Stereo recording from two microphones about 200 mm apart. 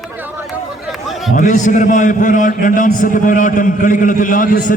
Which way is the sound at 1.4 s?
40° left (ahead or behind).